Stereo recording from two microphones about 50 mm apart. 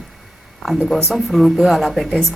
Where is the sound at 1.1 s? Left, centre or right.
Centre.